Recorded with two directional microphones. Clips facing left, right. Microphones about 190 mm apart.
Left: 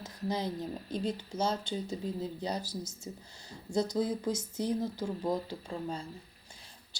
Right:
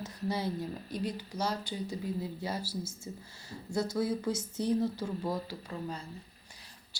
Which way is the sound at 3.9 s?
20° left (ahead or behind).